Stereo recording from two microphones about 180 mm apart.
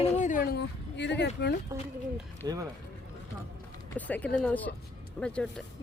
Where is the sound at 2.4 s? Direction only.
20° right (ahead or behind).